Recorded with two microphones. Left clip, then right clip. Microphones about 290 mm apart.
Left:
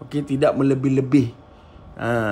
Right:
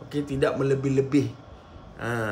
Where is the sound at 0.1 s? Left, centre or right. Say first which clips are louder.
Left 6 dB; left.